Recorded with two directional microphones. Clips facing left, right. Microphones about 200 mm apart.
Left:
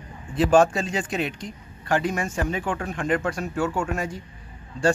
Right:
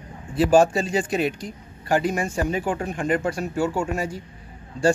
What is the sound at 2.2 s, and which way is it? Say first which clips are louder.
Speech: right 2 dB; 35° right (ahead or behind).